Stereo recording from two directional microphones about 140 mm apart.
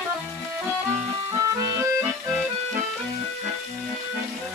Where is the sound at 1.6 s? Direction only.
20° right (ahead or behind).